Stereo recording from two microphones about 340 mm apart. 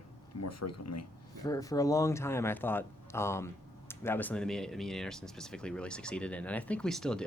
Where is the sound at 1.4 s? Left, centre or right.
Centre.